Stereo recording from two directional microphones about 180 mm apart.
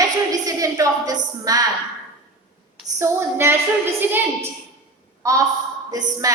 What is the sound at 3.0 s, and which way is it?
Speech, 15° right (ahead or behind).